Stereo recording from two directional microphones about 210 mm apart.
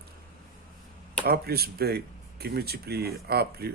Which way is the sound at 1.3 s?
45° right (ahead or behind).